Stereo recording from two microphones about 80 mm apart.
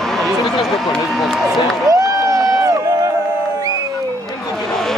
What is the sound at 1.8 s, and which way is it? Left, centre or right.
Crowd, right.